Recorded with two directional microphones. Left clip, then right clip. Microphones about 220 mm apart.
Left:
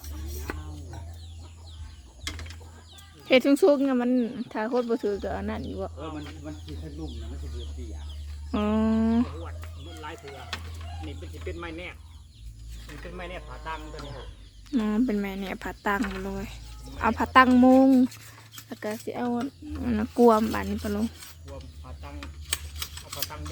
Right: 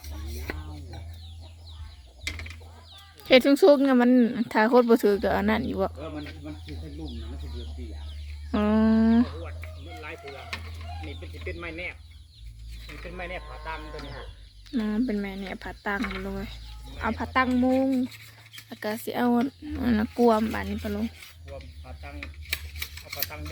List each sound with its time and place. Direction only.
3.2 s speech: centre (ahead or behind); by 5.9 s 15° right (ahead or behind)
8.4 s speech: centre (ahead or behind)
11.0 s speech: 10° left (ahead or behind)
16.0 s speech: centre (ahead or behind)
17.0 s speech: 25° left (ahead or behind)
18.7 s speech: 10° left (ahead or behind)
19.0 s speech: 5° right (ahead or behind)
20.1 s speech: 15° left (ahead or behind)
23.1 s speech: 15° left (ahead or behind)